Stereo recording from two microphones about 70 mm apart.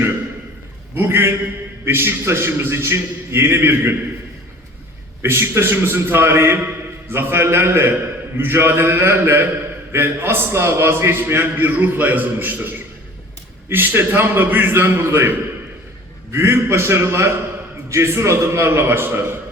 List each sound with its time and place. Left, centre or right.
0.9 s a man's voice: right
5.2 s a man's voice: right
16.3 s a man's voice: right